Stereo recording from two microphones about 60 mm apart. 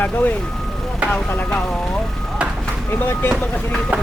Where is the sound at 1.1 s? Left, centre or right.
Left.